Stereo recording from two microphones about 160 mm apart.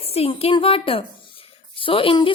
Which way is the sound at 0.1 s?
40° left (ahead or behind).